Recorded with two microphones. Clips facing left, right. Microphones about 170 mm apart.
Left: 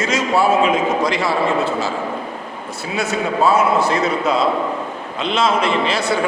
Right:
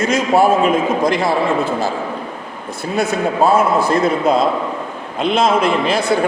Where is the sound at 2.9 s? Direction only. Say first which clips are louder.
Right 3 dB; 55° right (ahead or behind).